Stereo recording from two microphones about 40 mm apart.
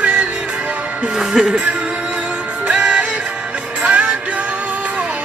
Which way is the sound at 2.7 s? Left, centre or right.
Centre.